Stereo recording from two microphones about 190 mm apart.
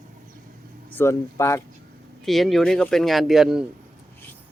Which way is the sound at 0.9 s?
15° left (ahead or behind).